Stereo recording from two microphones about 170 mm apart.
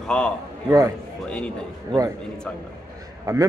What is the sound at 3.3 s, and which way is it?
Speech, 20° right (ahead or behind).